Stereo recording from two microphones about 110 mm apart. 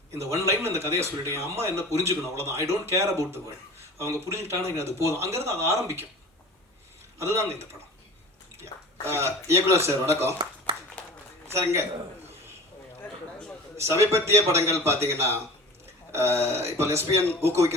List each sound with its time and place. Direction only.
0.1 s speech: 25° right (ahead or behind)
7.2 s speech: 25° right (ahead or behind)
8.5 s speech: 25° right (ahead or behind)
13.7 s speech: 25° right (ahead or behind)